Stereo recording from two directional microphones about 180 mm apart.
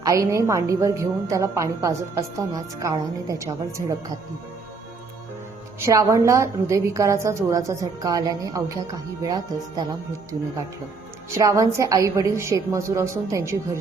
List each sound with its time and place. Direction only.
0.0 s a woman's voice: 20° right (ahead or behind)
5.8 s a woman's voice: 15° right (ahead or behind)
11.3 s a woman's voice: 15° right (ahead or behind)